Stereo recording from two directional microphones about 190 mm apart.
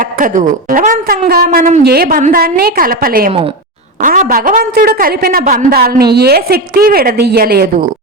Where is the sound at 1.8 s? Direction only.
55° right (ahead or behind).